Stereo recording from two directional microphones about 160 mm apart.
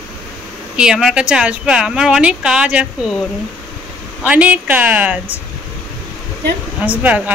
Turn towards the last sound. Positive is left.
turn(degrees=-10)  # may be behind; listen again after turning